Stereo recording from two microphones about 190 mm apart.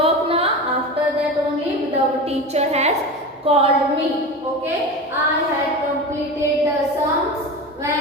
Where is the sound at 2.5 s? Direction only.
35° right (ahead or behind).